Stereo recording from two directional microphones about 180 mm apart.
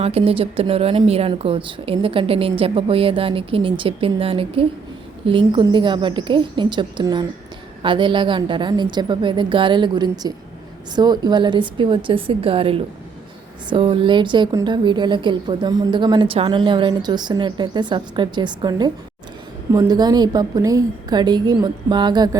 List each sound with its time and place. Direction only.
0.0 s a woman's voice: 35° right (ahead or behind)